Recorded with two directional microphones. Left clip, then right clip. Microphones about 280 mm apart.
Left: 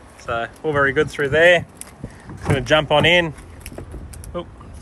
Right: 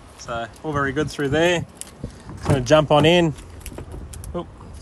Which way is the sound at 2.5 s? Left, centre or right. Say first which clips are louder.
Even; right.